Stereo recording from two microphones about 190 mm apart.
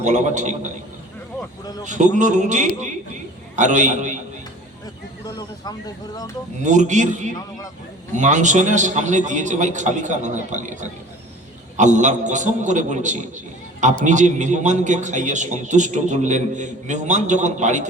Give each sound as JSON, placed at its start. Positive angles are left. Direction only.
{"t": 0.0, "sound": "a man's voice", "side_deg": -40}
{"t": 1.8, "sound": "a man's voice", "side_deg": -40}
{"t": 5.2, "sound": "speech", "side_deg": 20}
{"t": 6.6, "sound": "a man's voice", "side_deg": -40}